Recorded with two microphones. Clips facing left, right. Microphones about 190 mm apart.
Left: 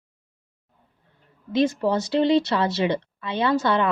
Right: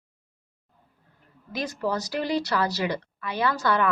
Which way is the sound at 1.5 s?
25° left (ahead or behind).